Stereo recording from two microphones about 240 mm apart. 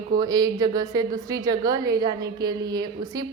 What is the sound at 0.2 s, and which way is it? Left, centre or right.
A woman's voice, centre.